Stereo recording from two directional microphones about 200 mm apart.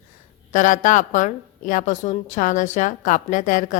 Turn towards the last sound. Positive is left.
turn(degrees=40)  # may be behind; listen again after turning